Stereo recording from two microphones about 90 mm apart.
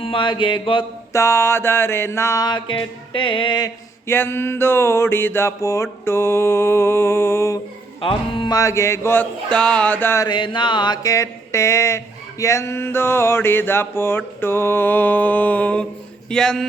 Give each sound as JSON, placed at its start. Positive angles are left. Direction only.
{"t": 0.0, "sound": "mantra", "side_deg": 75}
{"t": 1.1, "sound": "speech", "side_deg": 30}
{"t": 2.4, "sound": "music", "side_deg": 55}
{"t": 4.0, "sound": "speech", "side_deg": 25}
{"t": 8.4, "sound": "music", "side_deg": 40}
{"t": 9.5, "sound": "a sound", "side_deg": 10}
{"t": 10.2, "sound": "music", "side_deg": 60}
{"t": 11.0, "sound": "speech", "side_deg": 35}
{"t": 16.3, "sound": "a sound", "side_deg": 5}